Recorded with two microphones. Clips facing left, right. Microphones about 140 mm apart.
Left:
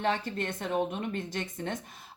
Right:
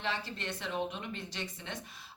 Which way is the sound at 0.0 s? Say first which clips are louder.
Left 7 dB; 50° left (ahead or behind).